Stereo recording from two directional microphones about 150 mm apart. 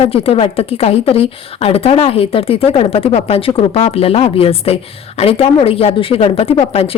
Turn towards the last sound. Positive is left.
turn(degrees=40)  # may be behind; listen again after turning